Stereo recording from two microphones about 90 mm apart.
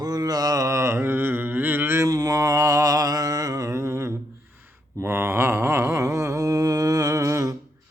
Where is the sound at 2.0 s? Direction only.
45° right (ahead or behind).